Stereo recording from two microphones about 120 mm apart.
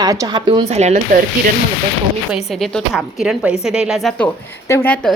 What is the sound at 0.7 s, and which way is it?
Speech, 70° right (ahead or behind).